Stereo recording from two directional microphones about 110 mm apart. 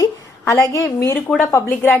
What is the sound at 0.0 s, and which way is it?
A woman's voice, 30° left (ahead or behind).